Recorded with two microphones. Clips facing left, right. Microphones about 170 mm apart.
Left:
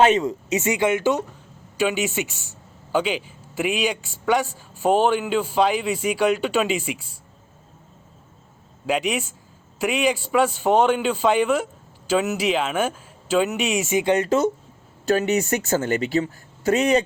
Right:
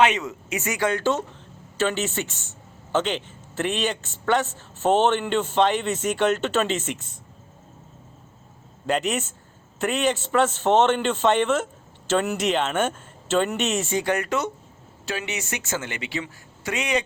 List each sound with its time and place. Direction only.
0.0 s speech: 35° left (ahead or behind)
0.6 s a man's voice: 20° left (ahead or behind)
8.9 s a man's voice: 10° left (ahead or behind); by 14.4 s 25° left (ahead or behind)
15.0 s speech: 40° left (ahead or behind)